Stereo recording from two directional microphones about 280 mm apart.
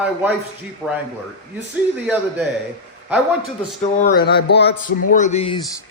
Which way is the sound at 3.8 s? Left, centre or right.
Left.